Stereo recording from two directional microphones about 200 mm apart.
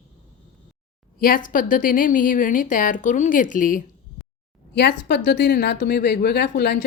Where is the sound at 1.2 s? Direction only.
45° left (ahead or behind).